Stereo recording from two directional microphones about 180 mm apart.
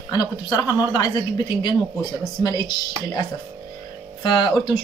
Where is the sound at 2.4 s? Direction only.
20° left (ahead or behind).